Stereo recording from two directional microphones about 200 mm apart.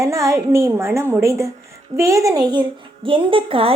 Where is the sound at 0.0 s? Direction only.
15° right (ahead or behind).